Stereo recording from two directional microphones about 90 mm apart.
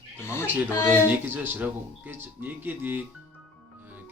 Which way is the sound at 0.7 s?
30° left (ahead or behind).